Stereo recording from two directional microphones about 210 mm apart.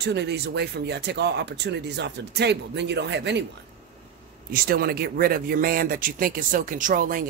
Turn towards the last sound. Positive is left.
turn(degrees=-40)  # may be behind; listen again after turning